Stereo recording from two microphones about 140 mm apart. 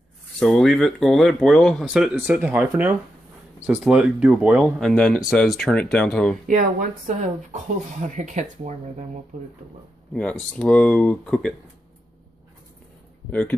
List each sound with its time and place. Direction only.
0.4 s speech: centre (ahead or behind)
6.4 s speech: 65° right (ahead or behind)
9.3 s speech: 75° right (ahead or behind)
10.5 s speech: 10° left (ahead or behind)
13.3 s speech: 10° left (ahead or behind)